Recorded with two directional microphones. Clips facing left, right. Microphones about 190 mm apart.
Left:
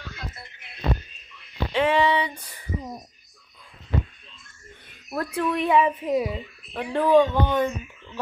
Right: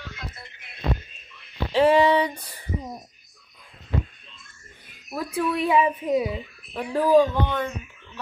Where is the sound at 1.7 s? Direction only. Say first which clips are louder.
Right 4 dB; 40° right (ahead or behind).